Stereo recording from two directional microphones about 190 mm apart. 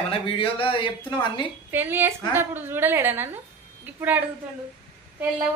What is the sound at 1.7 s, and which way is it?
A woman's voice, 10° right (ahead or behind).